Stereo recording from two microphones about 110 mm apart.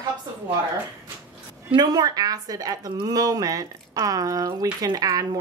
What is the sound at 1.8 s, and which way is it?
Speech, 40° right (ahead or behind).